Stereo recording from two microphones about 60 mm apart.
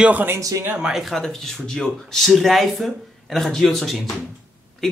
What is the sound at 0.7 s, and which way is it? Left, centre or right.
Speech, centre.